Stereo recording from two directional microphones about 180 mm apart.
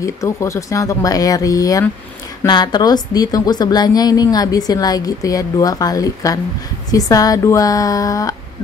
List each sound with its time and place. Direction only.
0.0 s a woman's voice: 15° left (ahead or behind)